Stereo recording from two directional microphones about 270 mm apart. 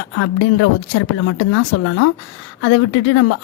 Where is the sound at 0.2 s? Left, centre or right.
Left.